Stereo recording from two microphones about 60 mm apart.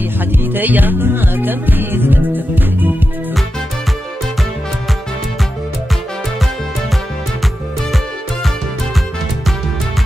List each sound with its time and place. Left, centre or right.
0.5 s music: right